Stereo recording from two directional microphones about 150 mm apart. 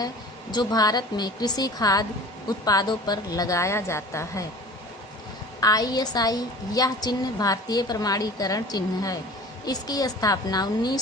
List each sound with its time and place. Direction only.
0.5 s a woman's voice: 25° left (ahead or behind)
5.5 s a woman's voice: 25° left (ahead or behind)